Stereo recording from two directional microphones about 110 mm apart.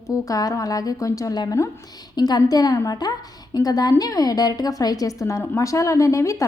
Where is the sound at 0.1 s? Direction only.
30° left (ahead or behind).